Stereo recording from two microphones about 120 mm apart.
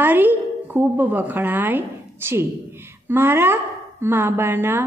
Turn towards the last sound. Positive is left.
turn(degrees=-20)  # may be behind; listen again after turning